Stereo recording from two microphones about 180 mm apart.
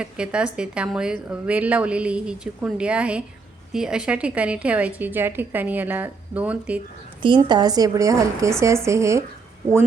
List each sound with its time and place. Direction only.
0.0 s a woman's voice: 5° right (ahead or behind)
7.2 s a woman's voice: 25° right (ahead or behind)